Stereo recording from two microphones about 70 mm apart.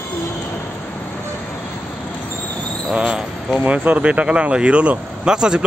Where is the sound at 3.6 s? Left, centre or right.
Right.